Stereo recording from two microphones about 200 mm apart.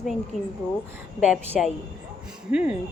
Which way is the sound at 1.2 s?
5° right (ahead or behind).